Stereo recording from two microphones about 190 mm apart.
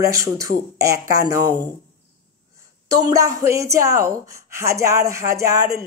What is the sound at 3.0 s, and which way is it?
Speech, 15° right (ahead or behind).